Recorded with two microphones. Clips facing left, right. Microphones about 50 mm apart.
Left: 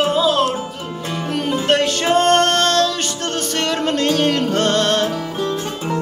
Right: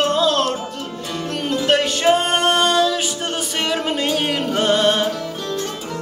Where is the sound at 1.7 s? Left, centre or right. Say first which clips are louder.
Right 1 dB; centre.